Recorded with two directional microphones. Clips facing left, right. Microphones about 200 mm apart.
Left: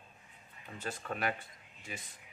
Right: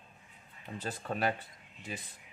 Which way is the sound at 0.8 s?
30° right (ahead or behind).